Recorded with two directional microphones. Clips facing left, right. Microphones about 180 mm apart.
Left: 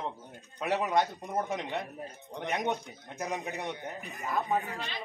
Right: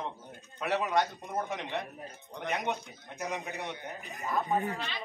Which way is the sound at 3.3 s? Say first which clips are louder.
Left 2 dB; 15° left (ahead or behind).